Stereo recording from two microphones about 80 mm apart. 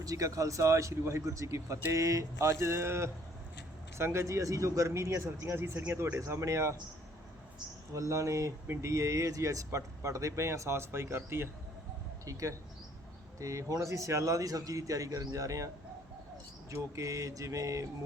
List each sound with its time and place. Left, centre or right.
0.0 s a man's voice: right
7.9 s a man's voice: right
12.2 s speech: right
16.7 s speech: right